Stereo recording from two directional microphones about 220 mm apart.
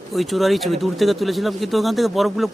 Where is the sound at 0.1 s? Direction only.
Centre (ahead or behind).